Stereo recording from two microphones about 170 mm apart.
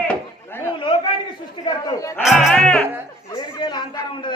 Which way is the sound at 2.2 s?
Centre (ahead or behind).